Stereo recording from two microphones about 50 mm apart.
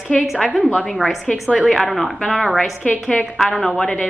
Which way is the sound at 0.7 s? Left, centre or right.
Centre.